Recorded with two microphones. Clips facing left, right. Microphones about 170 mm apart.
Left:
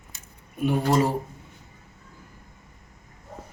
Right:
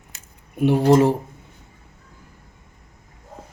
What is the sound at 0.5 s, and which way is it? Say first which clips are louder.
Speech: right 7 dB; 70° right (ahead or behind).